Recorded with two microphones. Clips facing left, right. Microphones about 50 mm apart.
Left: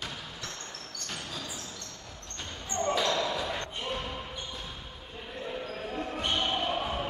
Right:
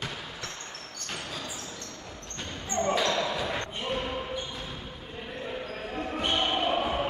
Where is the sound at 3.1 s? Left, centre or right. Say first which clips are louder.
Right 1 dB; centre.